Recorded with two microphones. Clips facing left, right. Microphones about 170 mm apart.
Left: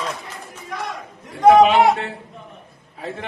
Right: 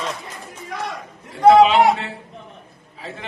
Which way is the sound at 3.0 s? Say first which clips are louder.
Left 4 dB; 55° left (ahead or behind).